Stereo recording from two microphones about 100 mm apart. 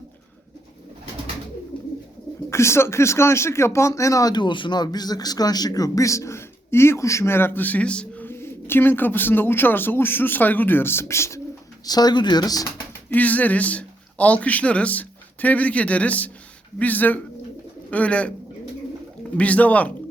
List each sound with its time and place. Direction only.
2.5 s speech: 25° left (ahead or behind)
11.9 s speech: 40° left (ahead or behind)
13.1 s a man's voice: 15° left (ahead or behind)
19.4 s speech: 15° left (ahead or behind)